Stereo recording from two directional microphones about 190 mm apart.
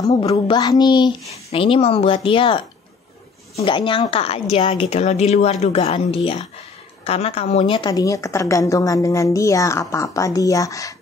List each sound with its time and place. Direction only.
0.3 s a child's voice: 20° left (ahead or behind)